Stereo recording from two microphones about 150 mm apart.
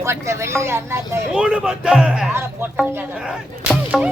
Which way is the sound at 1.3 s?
5° right (ahead or behind).